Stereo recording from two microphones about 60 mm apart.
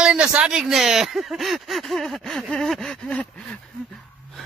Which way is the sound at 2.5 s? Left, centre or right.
Centre.